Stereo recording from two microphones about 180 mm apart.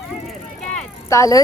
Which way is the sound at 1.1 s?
20° left (ahead or behind).